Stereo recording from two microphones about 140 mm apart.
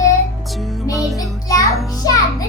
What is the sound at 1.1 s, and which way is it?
A child's voice, 25° left (ahead or behind).